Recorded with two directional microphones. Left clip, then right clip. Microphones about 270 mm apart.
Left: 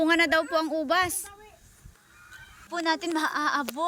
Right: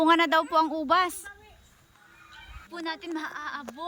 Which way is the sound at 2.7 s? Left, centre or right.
Centre.